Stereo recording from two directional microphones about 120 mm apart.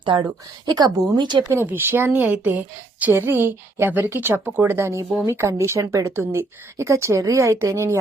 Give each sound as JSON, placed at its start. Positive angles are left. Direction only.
{"t": 0.0, "sound": "speech", "side_deg": -40}
{"t": 1.5, "sound": "a woman's voice", "side_deg": -20}